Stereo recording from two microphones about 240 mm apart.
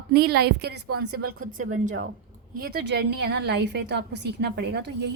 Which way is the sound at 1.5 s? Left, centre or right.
Right.